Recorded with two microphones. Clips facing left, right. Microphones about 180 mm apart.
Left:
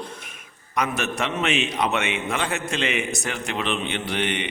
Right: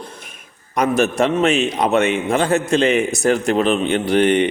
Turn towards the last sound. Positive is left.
turn(degrees=-40)  # may be behind; listen again after turning